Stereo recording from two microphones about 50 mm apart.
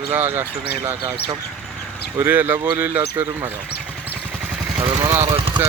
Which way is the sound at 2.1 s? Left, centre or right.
Right.